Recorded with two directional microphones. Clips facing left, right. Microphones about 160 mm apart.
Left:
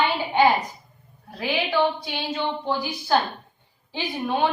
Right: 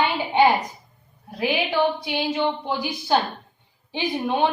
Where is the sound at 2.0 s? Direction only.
15° right (ahead or behind).